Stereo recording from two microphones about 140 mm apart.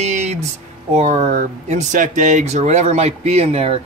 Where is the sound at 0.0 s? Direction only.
55° right (ahead or behind).